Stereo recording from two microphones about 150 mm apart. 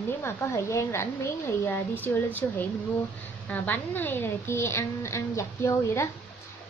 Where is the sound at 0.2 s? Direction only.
20° left (ahead or behind).